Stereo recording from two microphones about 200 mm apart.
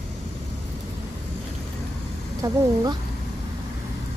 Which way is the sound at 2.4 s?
20° right (ahead or behind).